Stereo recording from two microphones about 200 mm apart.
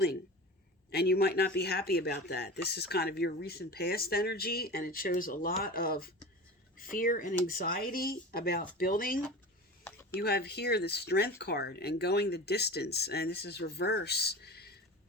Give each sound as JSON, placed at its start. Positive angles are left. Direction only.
{"t": 0.9, "sound": "speech", "side_deg": 50}
{"t": 9.8, "sound": "a sound", "side_deg": 10}
{"t": 10.2, "sound": "speech", "side_deg": 55}